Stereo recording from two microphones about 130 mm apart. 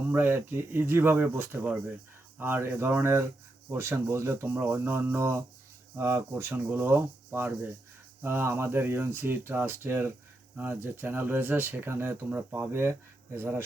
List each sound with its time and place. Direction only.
0.1 s speech: 20° right (ahead or behind)